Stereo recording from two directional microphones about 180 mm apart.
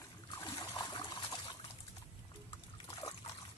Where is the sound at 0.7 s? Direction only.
25° left (ahead or behind).